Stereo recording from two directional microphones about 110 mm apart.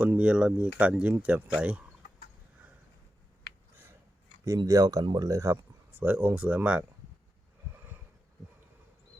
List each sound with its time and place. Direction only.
0.0 s speech: 15° right (ahead or behind)
4.4 s speech: 35° right (ahead or behind); by 6.8 s 10° right (ahead or behind)